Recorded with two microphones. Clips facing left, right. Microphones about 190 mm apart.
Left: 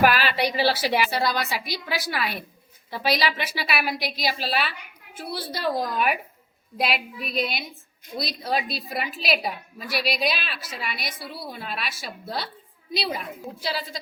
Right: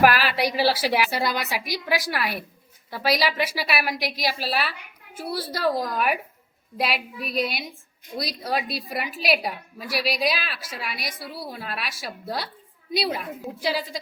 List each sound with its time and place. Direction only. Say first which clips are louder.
0.0 s a woman's voice: right 1 dB; 5° right (ahead or behind)
5.3 s a woman's voice: right 3 dB; 90° right
5.6 s a woman's voice: right 1 dB; centre (ahead or behind)
13.6 s a woman's voice: right 4 dB; 10° right (ahead or behind)